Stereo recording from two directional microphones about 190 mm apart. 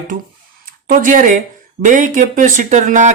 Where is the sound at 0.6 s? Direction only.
45° right (ahead or behind).